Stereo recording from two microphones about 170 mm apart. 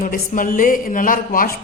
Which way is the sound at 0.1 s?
50° left (ahead or behind).